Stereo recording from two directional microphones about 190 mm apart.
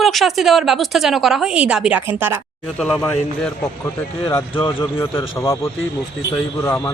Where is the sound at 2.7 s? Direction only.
5° left (ahead or behind).